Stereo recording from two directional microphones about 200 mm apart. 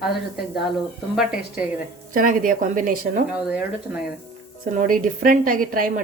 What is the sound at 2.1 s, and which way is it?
A woman's voice, 45° right (ahead or behind).